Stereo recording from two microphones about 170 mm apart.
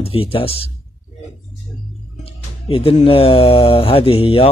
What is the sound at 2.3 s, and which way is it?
Speech, 30° left (ahead or behind).